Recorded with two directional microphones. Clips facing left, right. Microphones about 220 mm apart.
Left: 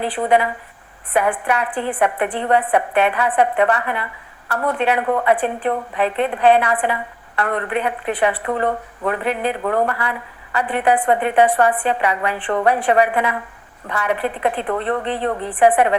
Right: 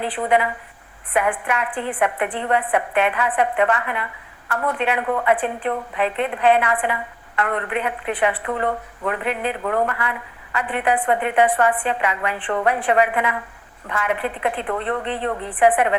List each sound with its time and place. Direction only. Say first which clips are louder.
0.1 s speech: left 2 dB; 35° left (ahead or behind)